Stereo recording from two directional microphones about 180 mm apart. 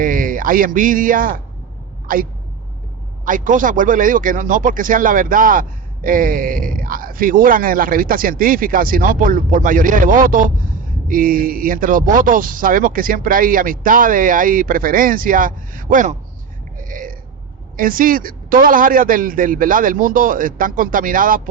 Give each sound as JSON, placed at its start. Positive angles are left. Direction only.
{"t": 0.0, "sound": "speech", "side_deg": -50}
{"t": 3.2, "sound": "speech", "side_deg": -45}
{"t": 16.7, "sound": "burping", "side_deg": -50}
{"t": 17.7, "sound": "speech", "side_deg": -50}